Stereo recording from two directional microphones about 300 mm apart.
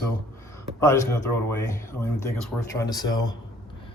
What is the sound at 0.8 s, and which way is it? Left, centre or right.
Speech, centre.